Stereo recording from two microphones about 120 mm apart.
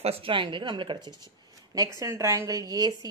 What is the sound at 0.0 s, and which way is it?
Speech, 50° right (ahead or behind).